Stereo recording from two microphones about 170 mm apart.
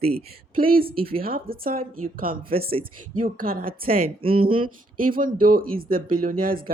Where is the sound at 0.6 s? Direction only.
60° right (ahead or behind).